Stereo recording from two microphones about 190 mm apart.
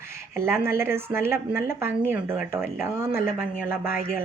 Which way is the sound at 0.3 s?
15° right (ahead or behind).